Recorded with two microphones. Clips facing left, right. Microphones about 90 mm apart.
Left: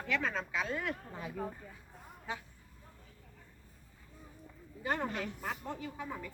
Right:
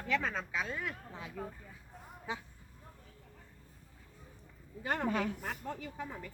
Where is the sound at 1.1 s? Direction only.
5° left (ahead or behind).